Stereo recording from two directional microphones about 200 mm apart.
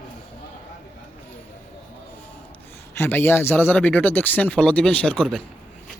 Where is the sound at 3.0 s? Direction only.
10° left (ahead or behind).